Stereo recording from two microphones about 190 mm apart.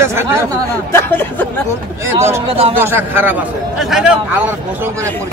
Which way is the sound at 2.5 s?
30° right (ahead or behind).